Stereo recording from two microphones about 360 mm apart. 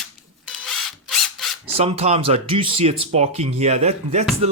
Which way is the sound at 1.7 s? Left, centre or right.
Centre.